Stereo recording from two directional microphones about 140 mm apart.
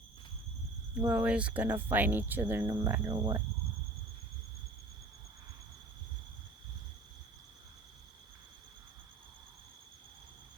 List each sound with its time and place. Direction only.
1.0 s speech: 10° right (ahead or behind)
2.6 s cricket: 20° right (ahead or behind)
3.1 s speech: 30° right (ahead or behind)